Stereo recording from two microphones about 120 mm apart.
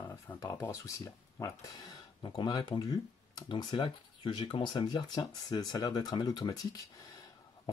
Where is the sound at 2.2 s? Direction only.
35° left (ahead or behind).